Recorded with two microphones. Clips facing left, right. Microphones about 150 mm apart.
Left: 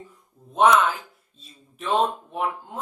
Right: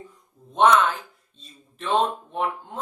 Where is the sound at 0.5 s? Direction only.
5° left (ahead or behind).